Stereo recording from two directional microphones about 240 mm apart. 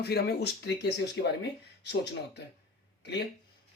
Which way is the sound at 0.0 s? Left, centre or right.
Left.